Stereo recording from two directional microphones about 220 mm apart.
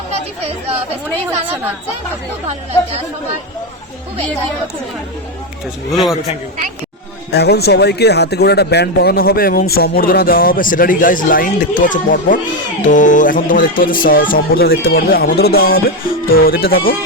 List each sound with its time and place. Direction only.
1.3 s a woman's voice: 10° right (ahead or behind)
5.9 s a man's voice: centre (ahead or behind)
7.3 s speech: 45° left (ahead or behind)